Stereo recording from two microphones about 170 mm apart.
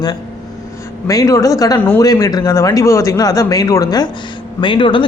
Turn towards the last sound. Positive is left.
turn(degrees=30)  # may be behind; listen again after turning